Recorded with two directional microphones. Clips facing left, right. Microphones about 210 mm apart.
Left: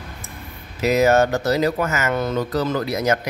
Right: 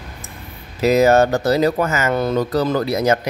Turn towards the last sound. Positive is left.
turn(degrees=-30)  # may be behind; listen again after turning